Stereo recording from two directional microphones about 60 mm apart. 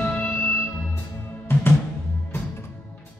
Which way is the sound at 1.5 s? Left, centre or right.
Left.